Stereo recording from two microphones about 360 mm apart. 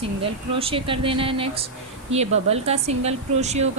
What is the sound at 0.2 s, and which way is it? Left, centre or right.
A woman's voice, centre.